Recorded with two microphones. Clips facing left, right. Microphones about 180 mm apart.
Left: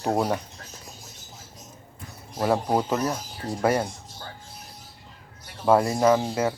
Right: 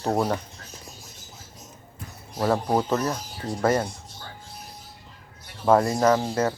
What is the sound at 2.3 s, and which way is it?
Speech, 10° left (ahead or behind).